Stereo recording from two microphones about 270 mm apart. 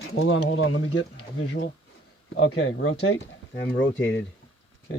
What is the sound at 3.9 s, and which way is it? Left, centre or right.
Speech, centre.